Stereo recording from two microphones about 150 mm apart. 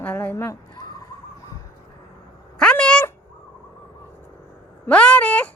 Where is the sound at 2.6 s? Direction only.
5° left (ahead or behind).